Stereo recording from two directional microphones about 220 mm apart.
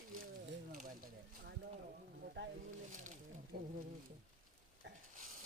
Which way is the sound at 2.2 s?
50° right (ahead or behind).